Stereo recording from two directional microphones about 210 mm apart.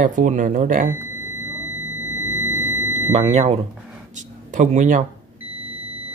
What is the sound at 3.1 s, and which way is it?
Speech, 30° right (ahead or behind).